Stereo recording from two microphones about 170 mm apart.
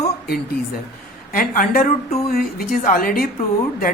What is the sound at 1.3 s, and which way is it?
A woman's voice, 55° left (ahead or behind).